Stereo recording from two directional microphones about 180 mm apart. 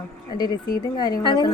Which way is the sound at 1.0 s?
25° left (ahead or behind).